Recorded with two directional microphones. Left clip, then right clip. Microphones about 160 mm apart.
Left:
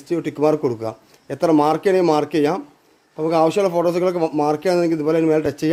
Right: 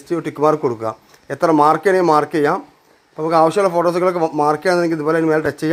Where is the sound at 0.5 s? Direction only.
15° left (ahead or behind).